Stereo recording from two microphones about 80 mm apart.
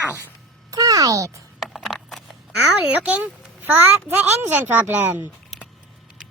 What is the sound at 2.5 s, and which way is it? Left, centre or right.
A woman's voice, centre.